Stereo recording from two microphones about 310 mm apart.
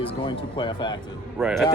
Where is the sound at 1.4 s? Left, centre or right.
Centre.